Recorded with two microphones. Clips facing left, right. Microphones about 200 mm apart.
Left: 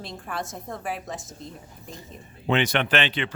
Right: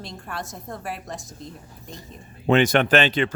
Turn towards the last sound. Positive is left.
turn(degrees=-45)  # may be behind; listen again after turning